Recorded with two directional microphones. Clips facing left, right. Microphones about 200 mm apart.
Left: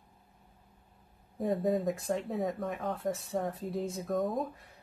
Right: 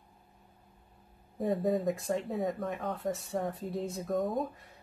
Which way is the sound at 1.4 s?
Centre (ahead or behind).